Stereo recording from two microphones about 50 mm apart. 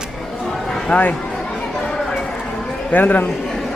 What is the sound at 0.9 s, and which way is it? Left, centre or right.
Speech, centre.